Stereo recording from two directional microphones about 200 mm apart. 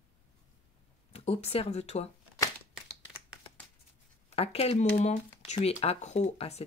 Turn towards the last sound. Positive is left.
turn(degrees=35)  # may be behind; listen again after turning